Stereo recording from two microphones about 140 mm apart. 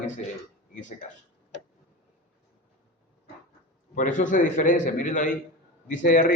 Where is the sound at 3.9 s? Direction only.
65° left (ahead or behind).